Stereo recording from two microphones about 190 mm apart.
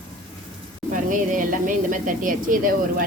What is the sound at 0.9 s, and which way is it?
Speech, 45° right (ahead or behind).